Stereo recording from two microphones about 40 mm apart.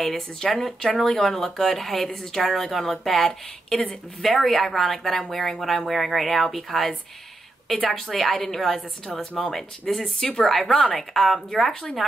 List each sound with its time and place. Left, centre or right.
0.0 s speech: centre
11.7 s speech: centre